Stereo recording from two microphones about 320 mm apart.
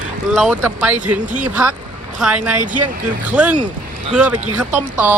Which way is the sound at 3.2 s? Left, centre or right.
Centre.